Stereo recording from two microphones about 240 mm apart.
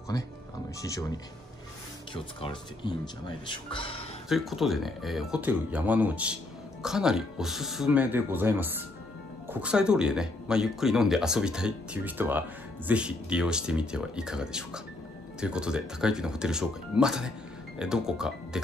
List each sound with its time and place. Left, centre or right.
0.1 s speech: centre
2.4 s speech: centre
4.3 s speech: centre